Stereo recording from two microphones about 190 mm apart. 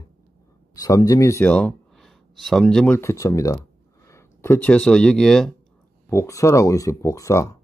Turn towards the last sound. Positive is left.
turn(degrees=15)  # may be behind; listen again after turning